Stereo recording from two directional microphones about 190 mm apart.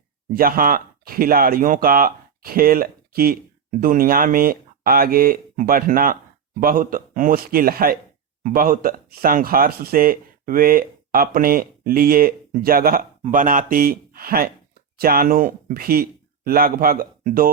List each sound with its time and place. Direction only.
0.3 s speech: 50° right (ahead or behind)